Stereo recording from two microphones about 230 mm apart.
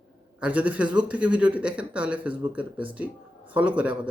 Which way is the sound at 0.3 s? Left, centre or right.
Centre.